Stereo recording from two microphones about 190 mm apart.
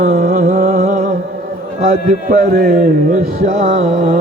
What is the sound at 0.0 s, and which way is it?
Music, 45° right (ahead or behind).